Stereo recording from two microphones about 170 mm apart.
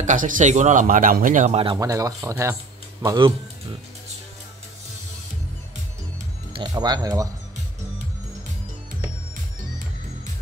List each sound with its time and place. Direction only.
0.0 s speech: 50° right (ahead or behind)
1.8 s speech: 20° right (ahead or behind)
6.5 s speech: 25° right (ahead or behind)